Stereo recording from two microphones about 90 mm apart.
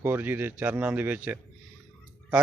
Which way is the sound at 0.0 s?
25° right (ahead or behind).